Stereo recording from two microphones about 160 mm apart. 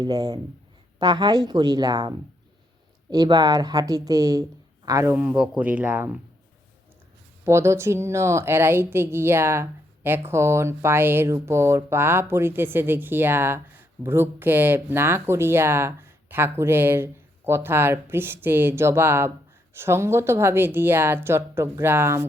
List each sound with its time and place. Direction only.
0.0 s speech: 25° right (ahead or behind)
7.4 s speech: 15° right (ahead or behind)